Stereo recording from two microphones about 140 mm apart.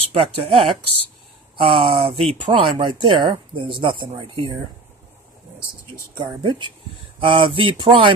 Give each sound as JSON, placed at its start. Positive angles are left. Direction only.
{"t": 0.1, "sound": "speech", "side_deg": -40}
{"t": 6.1, "sound": "speech", "side_deg": -35}